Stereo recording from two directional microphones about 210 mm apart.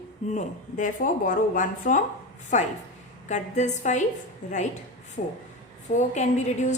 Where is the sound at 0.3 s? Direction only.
35° left (ahead or behind).